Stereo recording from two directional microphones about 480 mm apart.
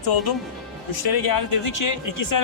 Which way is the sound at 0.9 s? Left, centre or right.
Left.